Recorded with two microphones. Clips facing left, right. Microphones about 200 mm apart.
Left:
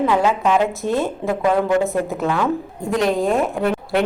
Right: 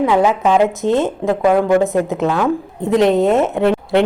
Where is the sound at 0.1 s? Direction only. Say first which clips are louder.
Right 3 dB; 15° right (ahead or behind).